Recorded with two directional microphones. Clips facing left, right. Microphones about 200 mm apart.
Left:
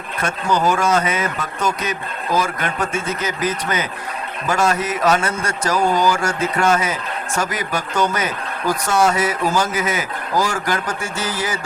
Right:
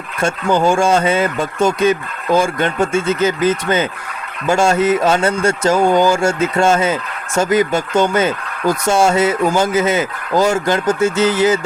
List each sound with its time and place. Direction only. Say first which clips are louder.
0.2 s speech: right 4 dB; 25° right (ahead or behind)